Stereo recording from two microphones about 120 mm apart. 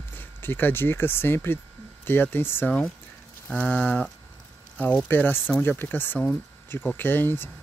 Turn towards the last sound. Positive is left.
turn(degrees=15)  # may be behind; listen again after turning